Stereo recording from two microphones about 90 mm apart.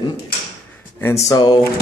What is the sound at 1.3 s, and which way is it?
Speech, 50° left (ahead or behind).